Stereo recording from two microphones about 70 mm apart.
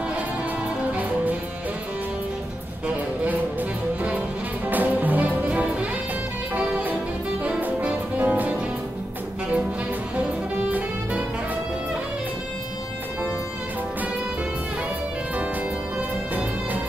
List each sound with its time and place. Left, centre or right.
4.6 s music: right
10.1 s music: centre